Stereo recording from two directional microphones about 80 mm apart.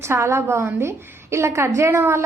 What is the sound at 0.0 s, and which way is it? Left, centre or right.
A woman's voice, right.